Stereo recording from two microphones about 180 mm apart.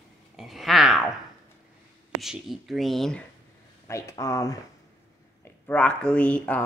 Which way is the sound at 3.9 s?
15° left (ahead or behind).